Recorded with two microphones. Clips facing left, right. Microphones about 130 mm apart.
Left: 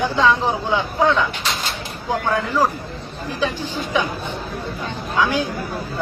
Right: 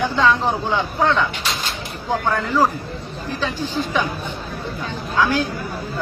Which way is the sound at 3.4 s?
15° left (ahead or behind).